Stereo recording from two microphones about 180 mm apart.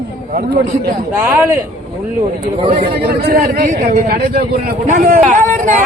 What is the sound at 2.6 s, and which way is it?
Speech, 35° right (ahead or behind).